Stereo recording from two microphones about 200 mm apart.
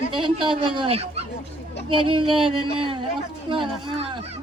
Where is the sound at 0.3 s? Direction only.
25° right (ahead or behind).